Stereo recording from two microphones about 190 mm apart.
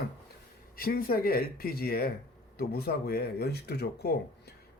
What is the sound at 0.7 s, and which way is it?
Speech, 50° left (ahead or behind).